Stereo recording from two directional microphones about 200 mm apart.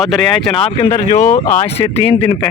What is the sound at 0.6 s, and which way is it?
Speech, 30° left (ahead or behind).